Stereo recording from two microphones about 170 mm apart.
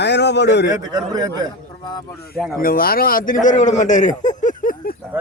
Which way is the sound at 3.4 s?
45° left (ahead or behind).